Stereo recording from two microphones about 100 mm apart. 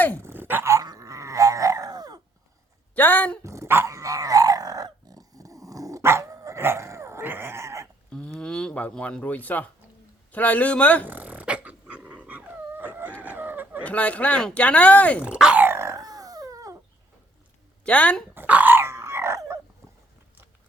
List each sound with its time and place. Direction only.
0.2 s dog: 20° right (ahead or behind)
0.9 s a sound: 35° right (ahead or behind)
2.9 s a woman's voice: 15° left (ahead or behind)
3.4 s dog: 30° right (ahead or behind)
8.1 s a sound: 10° left (ahead or behind)
10.3 s speech: 15° left (ahead or behind)
11.1 s dog: 15° right (ahead or behind)
13.8 s speech: 15° left (ahead or behind)
15.2 s dog: 10° right (ahead or behind)
15.6 s a sound: 25° right (ahead or behind)
17.8 s speech: 15° left (ahead or behind)
18.3 s dog: 15° right (ahead or behind)
19.8 s a sound: 30° right (ahead or behind)